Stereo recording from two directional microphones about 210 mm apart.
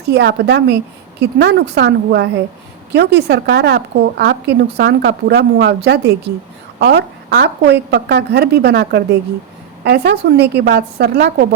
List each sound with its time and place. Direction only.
0.1 s a woman's voice: 55° right (ahead or behind)